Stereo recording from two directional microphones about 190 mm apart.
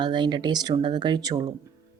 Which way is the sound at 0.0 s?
25° right (ahead or behind).